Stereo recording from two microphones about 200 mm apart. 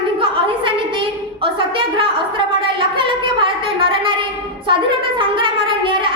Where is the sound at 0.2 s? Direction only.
25° right (ahead or behind).